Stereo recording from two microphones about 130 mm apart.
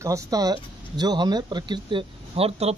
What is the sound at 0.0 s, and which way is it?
Speech, 25° right (ahead or behind).